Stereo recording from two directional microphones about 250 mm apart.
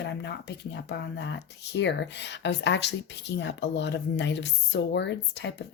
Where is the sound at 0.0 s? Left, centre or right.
Left.